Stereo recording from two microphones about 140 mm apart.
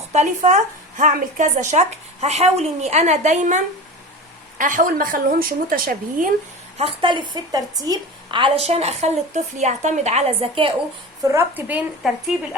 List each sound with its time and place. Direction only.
0.1 s speech: 55° right (ahead or behind)
4.5 s a woman's voice: 70° right (ahead or behind); by 6.2 s 90° right
6.7 s a woman's voice: 40° right (ahead or behind)
11.2 s speech: 20° right (ahead or behind)